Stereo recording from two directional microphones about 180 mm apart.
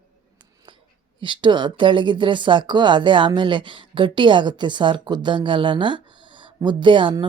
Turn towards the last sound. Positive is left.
turn(degrees=-25)  # may be behind; listen again after turning